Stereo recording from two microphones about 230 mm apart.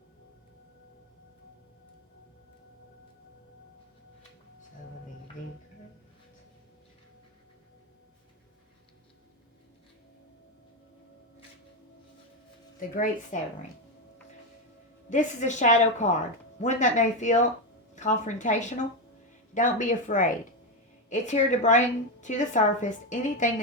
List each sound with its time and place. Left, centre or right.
12.8 s a woman's voice: left
15.1 s a woman's voice: left